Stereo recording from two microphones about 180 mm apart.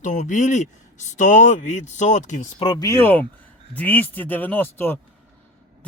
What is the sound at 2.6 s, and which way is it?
Speech, 25° left (ahead or behind).